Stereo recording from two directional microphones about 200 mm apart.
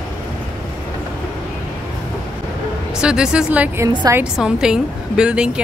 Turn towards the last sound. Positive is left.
turn(degrees=-5)  # may be behind; listen again after turning